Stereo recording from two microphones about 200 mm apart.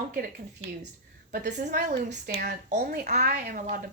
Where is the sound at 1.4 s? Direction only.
40° right (ahead or behind).